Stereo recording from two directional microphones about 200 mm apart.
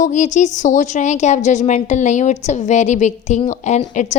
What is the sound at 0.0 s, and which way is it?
A woman's voice, 35° left (ahead or behind).